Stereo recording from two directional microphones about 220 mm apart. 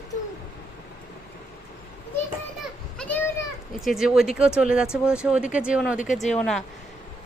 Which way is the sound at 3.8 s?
Centre (ahead or behind).